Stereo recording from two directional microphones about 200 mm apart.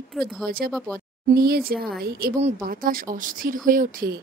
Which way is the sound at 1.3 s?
50° right (ahead or behind).